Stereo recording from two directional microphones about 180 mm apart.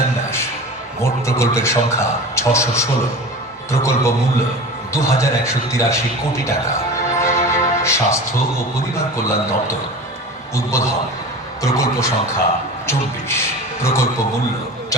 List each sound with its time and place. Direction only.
1.0 s speech: 15° left (ahead or behind)
7.1 s music: 15° left (ahead or behind)
9.0 s speech: 15° left (ahead or behind)